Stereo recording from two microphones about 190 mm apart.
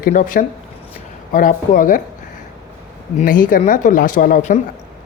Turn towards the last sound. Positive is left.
turn(degrees=45)  # may be behind; listen again after turning